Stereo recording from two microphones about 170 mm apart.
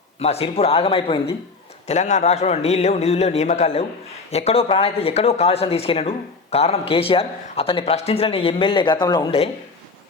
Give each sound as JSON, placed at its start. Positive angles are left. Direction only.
{"t": 0.2, "sound": "speech", "side_deg": 35}